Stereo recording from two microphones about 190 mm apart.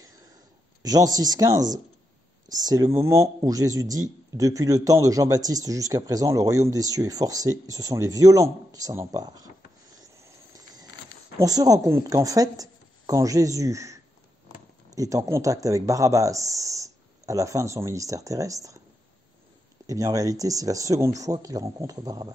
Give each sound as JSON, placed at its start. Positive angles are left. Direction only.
{"t": 0.8, "sound": "speech", "side_deg": -20}
{"t": 10.1, "sound": "a sound", "side_deg": -15}
{"t": 11.3, "sound": "a woman's voice", "side_deg": -20}
{"t": 19.9, "sound": "speech", "side_deg": -20}